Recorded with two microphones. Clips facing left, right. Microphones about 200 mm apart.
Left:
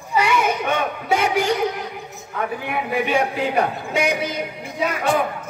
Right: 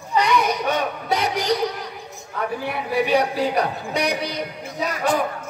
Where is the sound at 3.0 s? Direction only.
35° right (ahead or behind).